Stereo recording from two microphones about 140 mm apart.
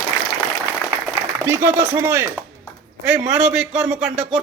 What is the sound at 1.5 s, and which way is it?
Speech, 15° right (ahead or behind).